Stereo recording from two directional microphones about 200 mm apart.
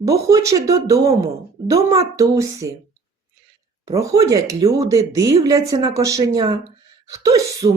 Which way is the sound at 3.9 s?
15° right (ahead or behind).